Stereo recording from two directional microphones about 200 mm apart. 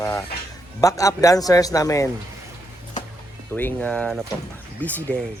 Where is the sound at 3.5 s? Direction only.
10° left (ahead or behind).